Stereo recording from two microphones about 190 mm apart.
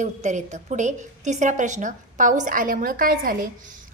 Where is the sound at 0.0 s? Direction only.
40° right (ahead or behind).